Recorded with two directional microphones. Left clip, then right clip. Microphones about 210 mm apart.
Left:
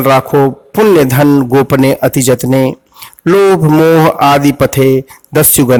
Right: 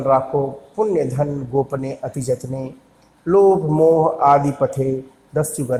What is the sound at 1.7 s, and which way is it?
Speech, 40° left (ahead or behind).